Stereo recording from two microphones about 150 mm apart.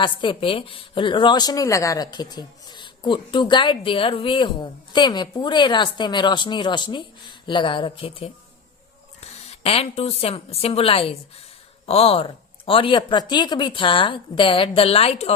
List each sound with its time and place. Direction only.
0.0 s a woman's voice: 35° left (ahead or behind)